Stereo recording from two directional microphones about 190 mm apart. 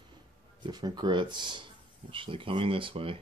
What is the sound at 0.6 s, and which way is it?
Speech, 20° right (ahead or behind).